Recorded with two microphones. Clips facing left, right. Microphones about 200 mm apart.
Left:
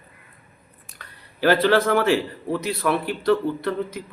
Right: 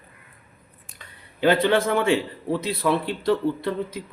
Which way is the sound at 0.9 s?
20° right (ahead or behind).